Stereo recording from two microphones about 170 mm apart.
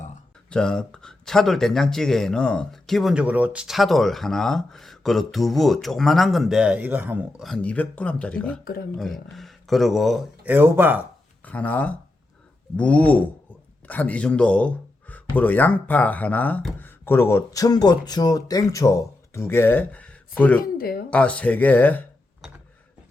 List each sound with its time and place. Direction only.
0.5 s speech: 5° left (ahead or behind); by 7.4 s 10° right (ahead or behind)
7.4 s speech: 5° left (ahead or behind)
8.6 s speech: 60° left (ahead or behind)
9.0 s speech: centre (ahead or behind)
10.5 s speech: 10° right (ahead or behind)
11.4 s speech: 10° left (ahead or behind)
20.6 s speech: 60° left (ahead or behind)
21.1 s speech: 5° left (ahead or behind)